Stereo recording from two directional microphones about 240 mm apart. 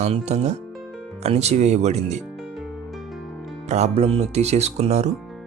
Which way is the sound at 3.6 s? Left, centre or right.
Right.